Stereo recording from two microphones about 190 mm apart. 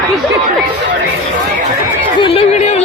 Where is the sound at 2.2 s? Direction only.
30° left (ahead or behind).